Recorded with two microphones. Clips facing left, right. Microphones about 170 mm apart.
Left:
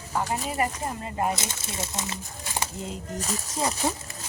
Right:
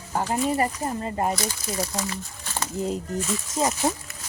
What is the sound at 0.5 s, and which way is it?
Speech, 35° right (ahead or behind).